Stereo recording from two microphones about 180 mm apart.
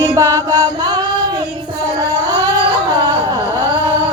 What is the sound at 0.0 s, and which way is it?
Music, 15° right (ahead or behind).